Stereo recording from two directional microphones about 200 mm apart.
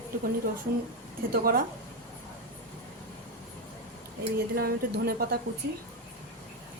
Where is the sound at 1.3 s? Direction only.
45° right (ahead or behind).